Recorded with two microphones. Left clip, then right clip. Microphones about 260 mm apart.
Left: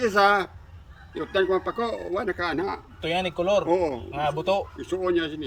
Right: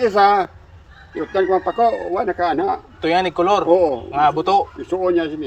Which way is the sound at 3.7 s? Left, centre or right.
Centre.